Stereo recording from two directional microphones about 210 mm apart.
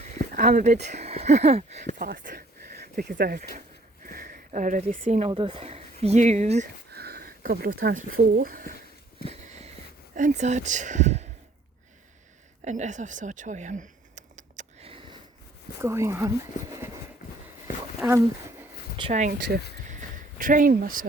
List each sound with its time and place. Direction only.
0.3 s speech: 40° right (ahead or behind)
2.0 s speech: 45° right (ahead or behind)
6.9 s speech: 50° right (ahead or behind)
9.2 s sniff: 30° right (ahead or behind)
10.2 s speech: 35° right (ahead or behind)
12.6 s a sound: 35° right (ahead or behind)
15.8 s speech: 15° right (ahead or behind)
18.0 s speech: 10° right (ahead or behind)
18.9 s speech: 25° right (ahead or behind)
20.4 s speech: 40° right (ahead or behind)